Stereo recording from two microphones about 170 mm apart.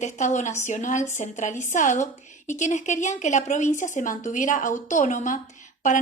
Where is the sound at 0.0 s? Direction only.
45° left (ahead or behind).